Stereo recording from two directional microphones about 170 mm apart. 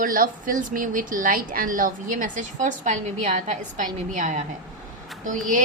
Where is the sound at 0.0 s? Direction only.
55° right (ahead or behind).